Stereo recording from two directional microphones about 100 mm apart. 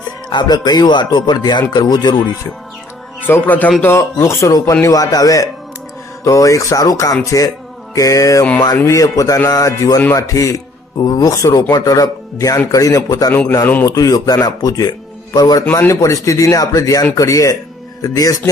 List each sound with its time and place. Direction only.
0.3 s speech: 45° left (ahead or behind)
3.2 s a man's voice: 20° left (ahead or behind); by 18.4 s 35° left (ahead or behind)